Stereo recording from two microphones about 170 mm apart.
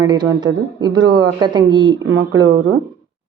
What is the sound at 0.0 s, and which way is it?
Speech, 25° right (ahead or behind).